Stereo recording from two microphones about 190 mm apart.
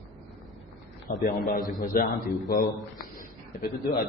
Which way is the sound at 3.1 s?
50° left (ahead or behind).